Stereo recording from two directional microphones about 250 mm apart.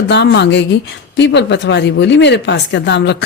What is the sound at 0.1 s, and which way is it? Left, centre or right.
A woman's voice, left.